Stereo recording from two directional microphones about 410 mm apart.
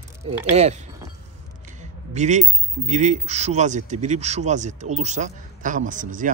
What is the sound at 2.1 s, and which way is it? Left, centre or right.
Speech, centre.